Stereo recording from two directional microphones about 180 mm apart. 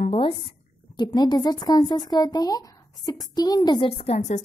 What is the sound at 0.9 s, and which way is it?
A woman's voice, 25° left (ahead or behind).